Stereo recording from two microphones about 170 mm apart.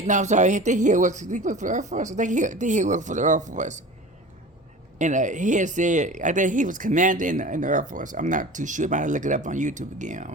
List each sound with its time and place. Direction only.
0.1 s speech: 45° right (ahead or behind)
4.9 s speech: 45° right (ahead or behind)